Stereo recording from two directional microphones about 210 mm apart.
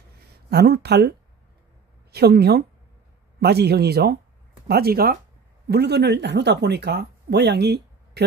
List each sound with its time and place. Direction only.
0.5 s speech: 50° right (ahead or behind)
2.1 s speech: 50° right (ahead or behind)